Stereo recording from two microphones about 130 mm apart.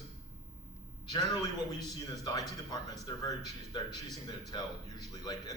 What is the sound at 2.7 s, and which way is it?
A man's voice, 30° left (ahead or behind).